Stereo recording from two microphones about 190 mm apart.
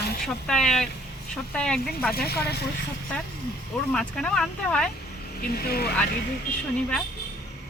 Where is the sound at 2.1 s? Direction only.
55° left (ahead or behind).